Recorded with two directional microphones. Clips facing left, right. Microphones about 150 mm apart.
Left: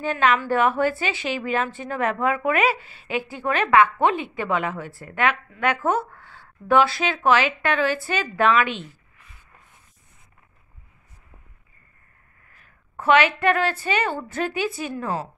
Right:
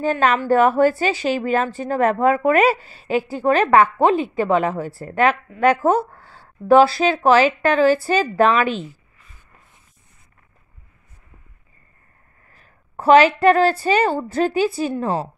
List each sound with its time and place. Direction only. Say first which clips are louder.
0.0 s a woman's voice: right 3 dB; 40° right (ahead or behind)
12.4 s a woman's voice: right 4 dB; 35° right (ahead or behind)